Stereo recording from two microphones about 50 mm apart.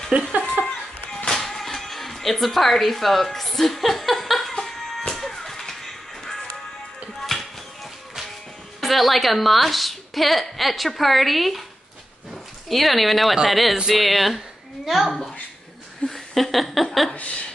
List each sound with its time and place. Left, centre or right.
0.1 s cat: right
0.6 s a sound: centre
1.2 s music: centre
8.8 s a woman's voice: centre
12.6 s a woman's voice: centre